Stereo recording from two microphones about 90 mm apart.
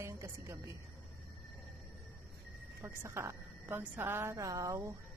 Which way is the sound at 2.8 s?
30° right (ahead or behind).